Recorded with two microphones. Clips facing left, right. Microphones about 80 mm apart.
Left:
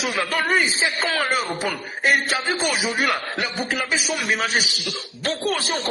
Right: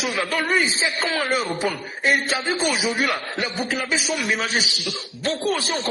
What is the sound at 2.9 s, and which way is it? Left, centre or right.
Speech, left.